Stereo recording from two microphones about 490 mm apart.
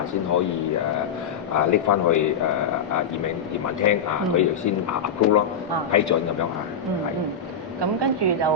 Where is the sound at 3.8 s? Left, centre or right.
Left.